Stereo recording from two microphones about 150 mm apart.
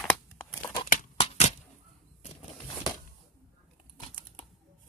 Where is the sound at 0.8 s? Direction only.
60° left (ahead or behind).